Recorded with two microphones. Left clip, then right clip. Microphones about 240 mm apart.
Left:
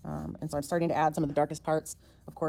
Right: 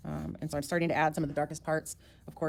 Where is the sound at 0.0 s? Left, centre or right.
Centre.